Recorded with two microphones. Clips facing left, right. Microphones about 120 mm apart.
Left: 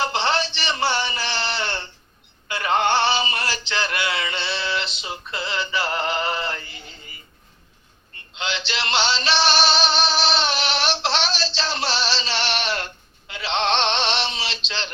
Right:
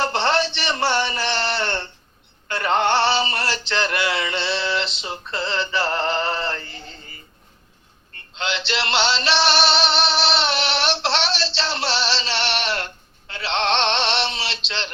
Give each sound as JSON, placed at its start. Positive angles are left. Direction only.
{"t": 0.0, "sound": "a sound", "side_deg": 20}
{"t": 2.5, "sound": "music", "side_deg": 15}
{"t": 4.4, "sound": "music", "side_deg": -25}
{"t": 4.6, "sound": "music", "side_deg": 20}
{"t": 5.1, "sound": "speech", "side_deg": -25}
{"t": 5.9, "sound": "synthetic singing", "side_deg": 20}
{"t": 8.3, "sound": "music", "side_deg": 20}